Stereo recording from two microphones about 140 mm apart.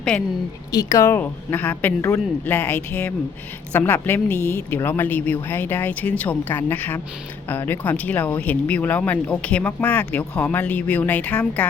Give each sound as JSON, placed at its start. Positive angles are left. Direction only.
{"t": 0.1, "sound": "speech", "side_deg": 5}
{"t": 0.7, "sound": "speech", "side_deg": 25}